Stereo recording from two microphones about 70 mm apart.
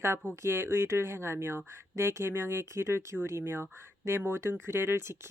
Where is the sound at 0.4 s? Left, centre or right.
Right.